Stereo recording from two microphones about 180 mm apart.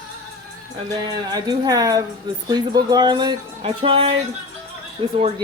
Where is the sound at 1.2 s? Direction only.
20° right (ahead or behind).